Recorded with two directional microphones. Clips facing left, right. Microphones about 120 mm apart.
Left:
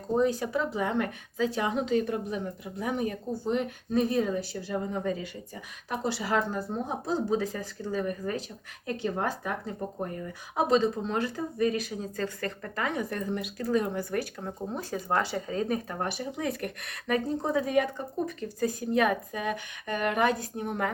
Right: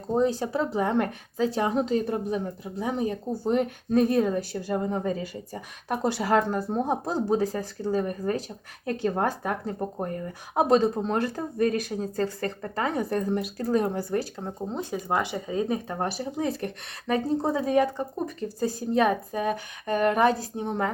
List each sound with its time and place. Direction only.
0.2 s speech: 30° right (ahead or behind)
3.5 s a woman's voice: 50° right (ahead or behind)
14.0 s speech: 30° right (ahead or behind)
15.9 s speech: 30° right (ahead or behind)